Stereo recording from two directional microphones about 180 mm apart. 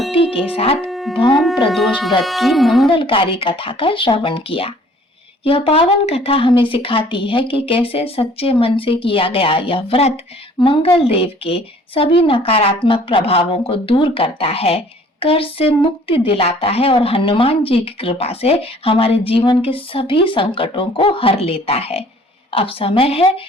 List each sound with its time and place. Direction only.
0.5 s a woman's voice: 30° left (ahead or behind)
0.9 s music: centre (ahead or behind)
1.7 s speech: centre (ahead or behind)
2.9 s a woman's voice: 30° left (ahead or behind)